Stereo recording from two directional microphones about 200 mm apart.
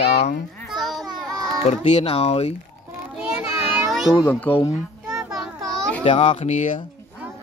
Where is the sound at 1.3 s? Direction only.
15° right (ahead or behind).